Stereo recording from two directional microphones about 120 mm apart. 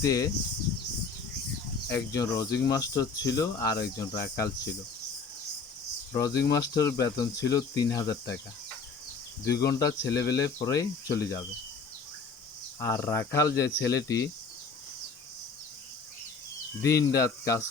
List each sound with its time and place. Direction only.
0.0 s speech: 30° left (ahead or behind)
1.9 s speech: 30° left (ahead or behind)
6.1 s speech: 30° left (ahead or behind)
9.5 s speech: 30° left (ahead or behind)
12.8 s speech: 20° left (ahead or behind)
16.8 s speech: 25° left (ahead or behind)